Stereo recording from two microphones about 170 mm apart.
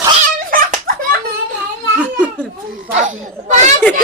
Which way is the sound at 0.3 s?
50° right (ahead or behind).